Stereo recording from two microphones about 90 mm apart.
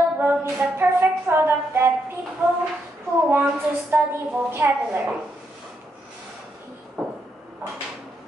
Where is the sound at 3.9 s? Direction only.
25° right (ahead or behind).